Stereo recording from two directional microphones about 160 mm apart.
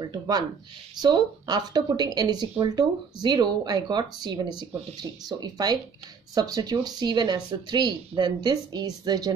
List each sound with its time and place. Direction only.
0.0 s speech: 25° right (ahead or behind)